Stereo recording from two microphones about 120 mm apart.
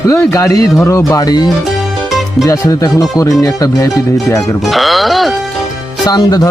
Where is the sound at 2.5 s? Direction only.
30° left (ahead or behind).